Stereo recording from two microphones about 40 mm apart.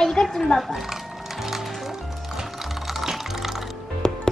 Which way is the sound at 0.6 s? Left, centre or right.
Centre.